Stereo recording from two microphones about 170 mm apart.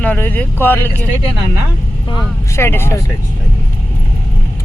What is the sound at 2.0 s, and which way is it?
Speech, 25° left (ahead or behind).